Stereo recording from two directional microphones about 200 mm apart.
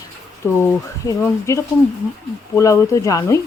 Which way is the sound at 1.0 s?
15° left (ahead or behind).